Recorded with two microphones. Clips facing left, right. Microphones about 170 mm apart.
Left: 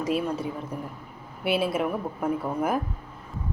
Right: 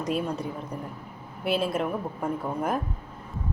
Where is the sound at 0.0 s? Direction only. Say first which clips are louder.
Left 2 dB; centre (ahead or behind).